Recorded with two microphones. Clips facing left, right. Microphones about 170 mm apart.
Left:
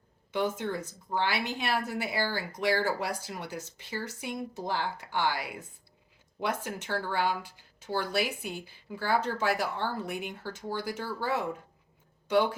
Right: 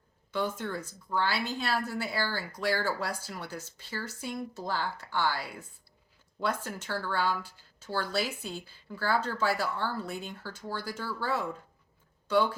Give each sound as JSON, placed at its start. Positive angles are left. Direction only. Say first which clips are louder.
{"t": 0.3, "sound": "a woman's voice", "louder": "left 2 dB", "side_deg": 20}